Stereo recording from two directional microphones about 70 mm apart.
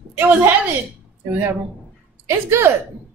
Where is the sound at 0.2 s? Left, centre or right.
Right.